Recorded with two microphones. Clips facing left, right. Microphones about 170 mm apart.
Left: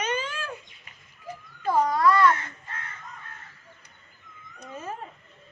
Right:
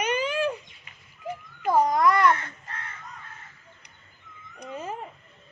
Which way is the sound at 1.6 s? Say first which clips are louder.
Right 1 dB; 15° right (ahead or behind).